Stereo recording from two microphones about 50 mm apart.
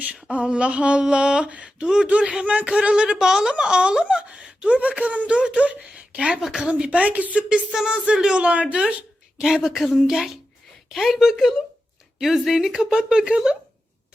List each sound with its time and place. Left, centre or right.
0.0 s a woman's voice: right
7.7 s a woman's voice: centre
9.4 s a woman's voice: centre